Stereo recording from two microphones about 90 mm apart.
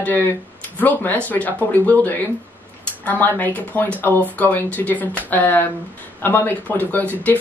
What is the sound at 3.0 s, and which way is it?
Speech, 20° left (ahead or behind).